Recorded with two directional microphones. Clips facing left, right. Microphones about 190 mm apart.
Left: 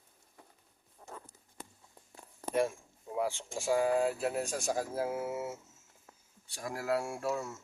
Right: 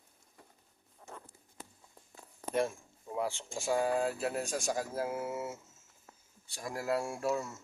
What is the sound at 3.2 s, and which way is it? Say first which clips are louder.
Speech: left 2 dB; 10° left (ahead or behind).